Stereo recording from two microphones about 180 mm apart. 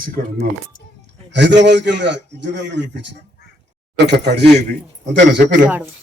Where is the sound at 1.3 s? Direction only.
75° right (ahead or behind).